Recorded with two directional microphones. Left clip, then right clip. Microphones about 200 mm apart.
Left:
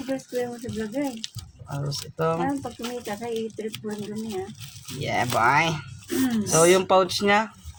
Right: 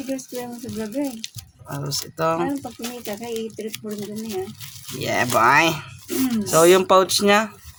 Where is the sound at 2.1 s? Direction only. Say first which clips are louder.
Right 3 dB; 30° right (ahead or behind).